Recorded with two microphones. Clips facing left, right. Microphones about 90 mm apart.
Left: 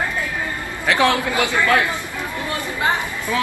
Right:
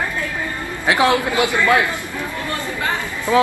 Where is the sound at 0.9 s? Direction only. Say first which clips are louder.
Right 1 dB; 15° right (ahead or behind).